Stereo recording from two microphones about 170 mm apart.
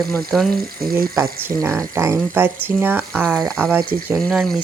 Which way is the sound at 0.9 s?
15° right (ahead or behind).